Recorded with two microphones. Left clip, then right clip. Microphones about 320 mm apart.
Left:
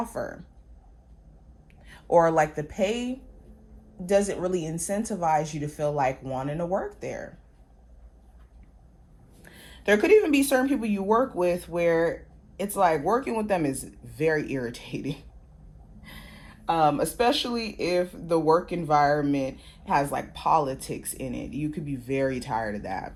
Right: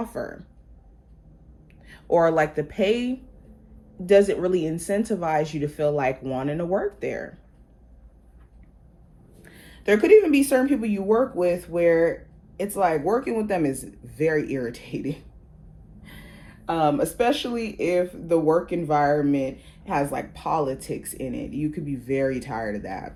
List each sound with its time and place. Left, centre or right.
0.0 s speech: left
1.9 s speech: left
4.1 s speech: centre
5.4 s speech: centre
5.7 s speech: centre
9.4 s speech: left
16.7 s speech: left